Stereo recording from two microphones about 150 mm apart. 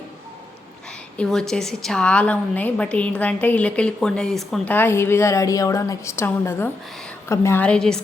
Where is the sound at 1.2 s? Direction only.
5° left (ahead or behind).